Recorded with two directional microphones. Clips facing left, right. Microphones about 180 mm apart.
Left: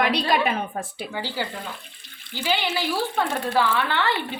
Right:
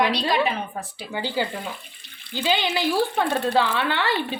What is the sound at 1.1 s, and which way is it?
A woman's voice, 15° right (ahead or behind).